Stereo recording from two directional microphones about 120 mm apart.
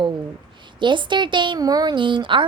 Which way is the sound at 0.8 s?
40° right (ahead or behind).